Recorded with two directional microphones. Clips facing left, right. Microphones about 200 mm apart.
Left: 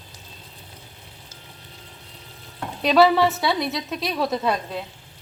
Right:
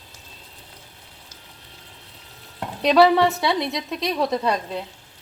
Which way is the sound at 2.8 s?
Centre (ahead or behind).